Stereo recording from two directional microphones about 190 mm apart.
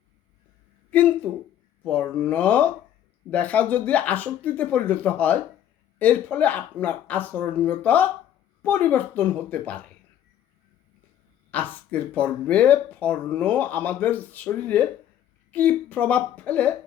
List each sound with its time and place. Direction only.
0.9 s speech: 10° left (ahead or behind)
11.5 s speech: 10° left (ahead or behind)